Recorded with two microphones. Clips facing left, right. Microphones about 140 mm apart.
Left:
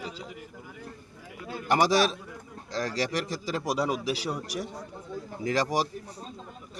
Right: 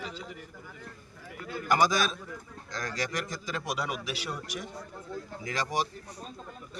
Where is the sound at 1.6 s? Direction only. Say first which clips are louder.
Left 3 dB; 30° left (ahead or behind).